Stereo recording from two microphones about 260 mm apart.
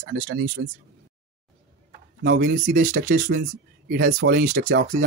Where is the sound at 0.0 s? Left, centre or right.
Right.